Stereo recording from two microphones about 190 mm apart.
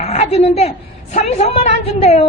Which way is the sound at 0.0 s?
35° left (ahead or behind).